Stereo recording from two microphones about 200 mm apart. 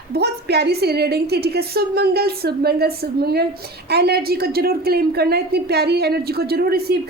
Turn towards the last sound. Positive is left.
turn(degrees=-50)  # may be behind; listen again after turning